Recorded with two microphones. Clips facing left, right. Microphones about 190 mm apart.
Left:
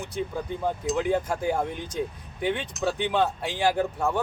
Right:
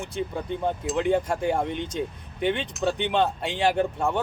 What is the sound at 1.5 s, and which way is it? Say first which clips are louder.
Speech: right 1 dB; 25° right (ahead or behind).